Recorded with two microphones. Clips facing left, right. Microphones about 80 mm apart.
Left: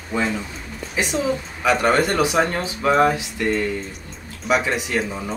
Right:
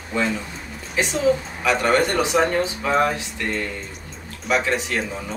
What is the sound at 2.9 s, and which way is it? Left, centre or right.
Speech, centre.